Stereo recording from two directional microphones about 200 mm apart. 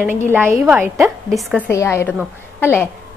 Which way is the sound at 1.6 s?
15° left (ahead or behind).